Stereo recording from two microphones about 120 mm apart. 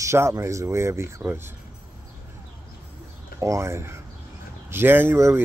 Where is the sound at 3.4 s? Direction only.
25° right (ahead or behind).